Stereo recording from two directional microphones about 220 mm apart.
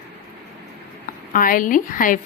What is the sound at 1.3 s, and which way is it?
Speech, 40° left (ahead or behind).